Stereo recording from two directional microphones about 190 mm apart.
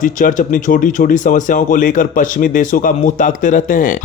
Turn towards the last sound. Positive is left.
turn(degrees=45)  # may be behind; listen again after turning